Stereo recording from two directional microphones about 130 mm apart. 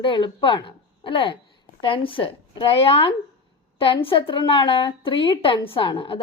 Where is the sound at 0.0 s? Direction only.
40° left (ahead or behind).